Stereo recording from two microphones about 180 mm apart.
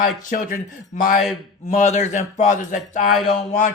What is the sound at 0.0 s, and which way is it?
Speech, 45° left (ahead or behind).